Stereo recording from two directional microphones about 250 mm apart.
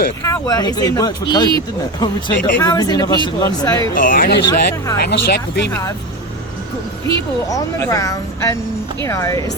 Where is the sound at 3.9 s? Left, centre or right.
Left.